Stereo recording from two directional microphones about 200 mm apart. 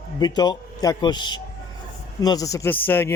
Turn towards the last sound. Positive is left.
turn(degrees=10)  # may be behind; listen again after turning